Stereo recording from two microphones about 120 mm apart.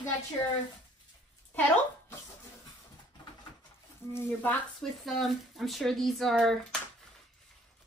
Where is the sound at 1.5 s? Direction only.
15° left (ahead or behind).